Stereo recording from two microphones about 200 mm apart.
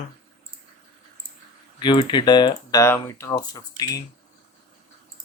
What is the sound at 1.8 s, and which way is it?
Speech, 25° left (ahead or behind).